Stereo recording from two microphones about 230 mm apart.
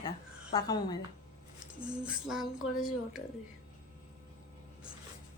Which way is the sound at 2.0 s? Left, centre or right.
Centre.